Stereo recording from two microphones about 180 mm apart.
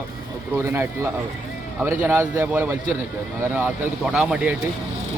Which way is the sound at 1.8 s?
10° right (ahead or behind).